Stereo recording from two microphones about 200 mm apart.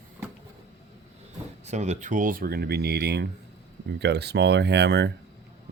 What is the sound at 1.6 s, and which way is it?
Speech, 35° right (ahead or behind).